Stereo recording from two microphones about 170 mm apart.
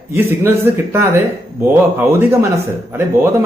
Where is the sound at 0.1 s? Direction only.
15° right (ahead or behind).